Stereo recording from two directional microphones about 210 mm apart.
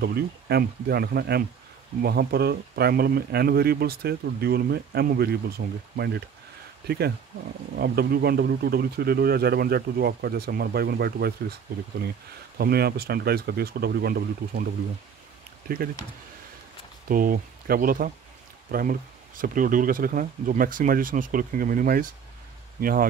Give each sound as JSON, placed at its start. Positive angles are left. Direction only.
{"t": 0.0, "sound": "speech", "side_deg": -50}
{"t": 5.6, "sound": "speech", "side_deg": -40}
{"t": 5.9, "sound": "speech", "side_deg": -50}
{"t": 7.7, "sound": "speech", "side_deg": -50}
{"t": 17.1, "sound": "speech", "side_deg": -40}